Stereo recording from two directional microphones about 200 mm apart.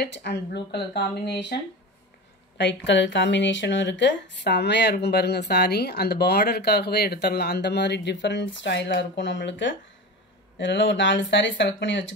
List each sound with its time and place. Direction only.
0.0 s speech: 55° left (ahead or behind)
2.5 s speech: 60° left (ahead or behind)